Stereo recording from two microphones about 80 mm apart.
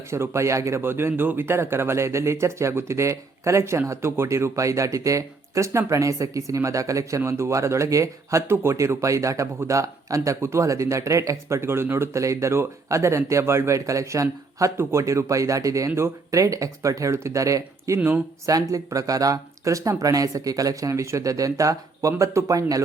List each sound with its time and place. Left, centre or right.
0.1 s a man's voice: right
12.2 s a man's voice: right